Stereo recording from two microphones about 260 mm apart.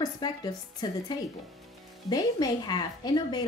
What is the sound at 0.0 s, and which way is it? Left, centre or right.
A woman's voice, centre.